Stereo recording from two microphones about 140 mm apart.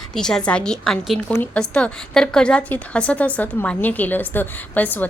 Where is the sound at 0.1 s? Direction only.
5° left (ahead or behind).